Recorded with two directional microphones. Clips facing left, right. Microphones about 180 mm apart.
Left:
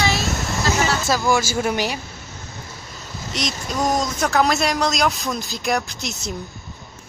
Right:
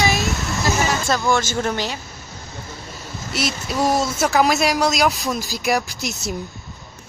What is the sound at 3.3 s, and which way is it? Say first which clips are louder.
Speech: right 2 dB; 5° right (ahead or behind).